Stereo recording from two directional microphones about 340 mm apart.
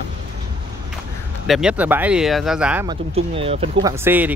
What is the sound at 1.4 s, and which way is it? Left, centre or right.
Speech, centre.